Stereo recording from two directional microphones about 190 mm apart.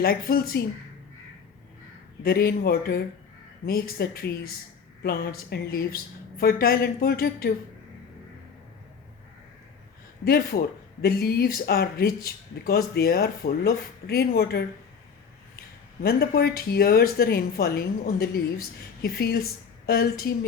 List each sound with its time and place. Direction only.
0.0 s a woman's voice: 50° left (ahead or behind)
2.2 s a woman's voice: 55° left (ahead or behind)
10.2 s a woman's voice: 55° left (ahead or behind)
16.0 s a woman's voice: 50° left (ahead or behind)